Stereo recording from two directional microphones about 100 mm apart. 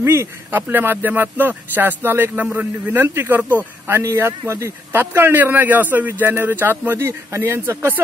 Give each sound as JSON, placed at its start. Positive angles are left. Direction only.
{"t": 0.0, "sound": "a man's voice", "side_deg": -25}